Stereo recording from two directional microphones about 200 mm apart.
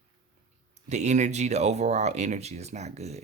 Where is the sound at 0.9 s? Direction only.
35° right (ahead or behind).